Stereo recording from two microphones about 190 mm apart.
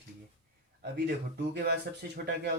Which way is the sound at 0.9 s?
60° right (ahead or behind).